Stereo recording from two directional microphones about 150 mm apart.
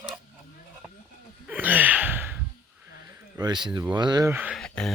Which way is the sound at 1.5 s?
10° right (ahead or behind).